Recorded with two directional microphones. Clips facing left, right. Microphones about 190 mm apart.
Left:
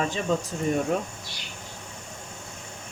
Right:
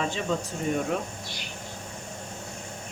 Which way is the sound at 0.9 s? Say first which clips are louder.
Left 2 dB; 40° left (ahead or behind).